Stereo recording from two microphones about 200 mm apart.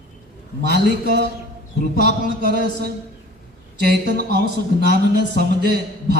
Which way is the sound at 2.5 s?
50° right (ahead or behind).